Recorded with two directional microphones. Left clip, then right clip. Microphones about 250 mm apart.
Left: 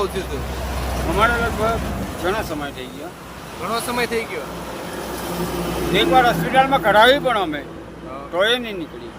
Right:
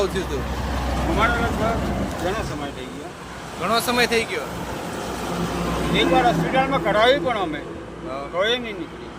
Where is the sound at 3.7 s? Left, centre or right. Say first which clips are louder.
Right 3 dB; centre.